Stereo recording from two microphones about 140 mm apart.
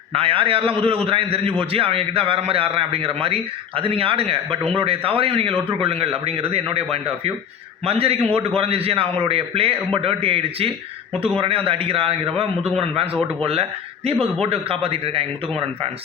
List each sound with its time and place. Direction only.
0.1 s a man's voice: 40° right (ahead or behind)
12.6 s a man's voice: centre (ahead or behind)
13.4 s a man's voice: 45° right (ahead or behind)